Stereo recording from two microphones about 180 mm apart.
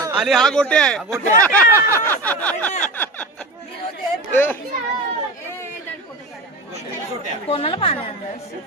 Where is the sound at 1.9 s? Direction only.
10° left (ahead or behind).